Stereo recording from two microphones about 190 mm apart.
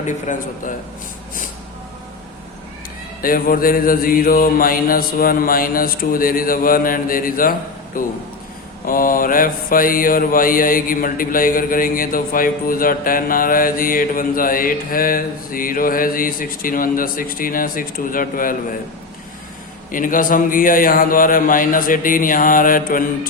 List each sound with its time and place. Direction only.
0.0 s mantra: 45° left (ahead or behind)
3.2 s mantra: 50° left (ahead or behind)
19.9 s mantra: 45° left (ahead or behind)